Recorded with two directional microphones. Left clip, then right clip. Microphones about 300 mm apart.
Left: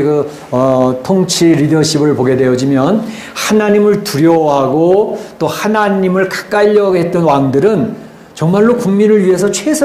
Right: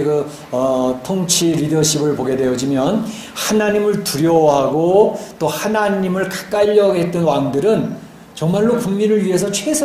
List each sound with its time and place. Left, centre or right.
0.0 s speech: left